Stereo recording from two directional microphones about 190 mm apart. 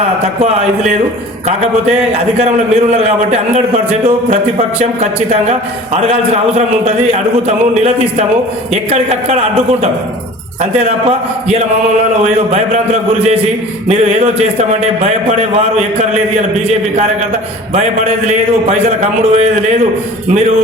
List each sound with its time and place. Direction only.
1.5 s a man's voice: 35° right (ahead or behind)
12.2 s a man's voice: 35° right (ahead or behind)
16.6 s a man's voice: 35° right (ahead or behind)
18.3 s a man's voice: 35° right (ahead or behind)